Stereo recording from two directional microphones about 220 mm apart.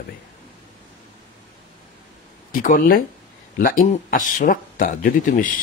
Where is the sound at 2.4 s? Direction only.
40° left (ahead or behind).